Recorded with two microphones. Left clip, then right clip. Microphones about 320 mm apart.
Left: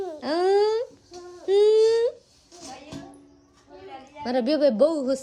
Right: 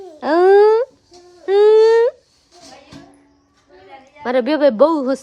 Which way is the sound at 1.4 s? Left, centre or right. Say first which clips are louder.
Right 7 dB; centre.